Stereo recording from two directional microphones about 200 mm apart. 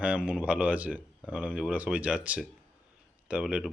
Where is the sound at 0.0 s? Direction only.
5° right (ahead or behind).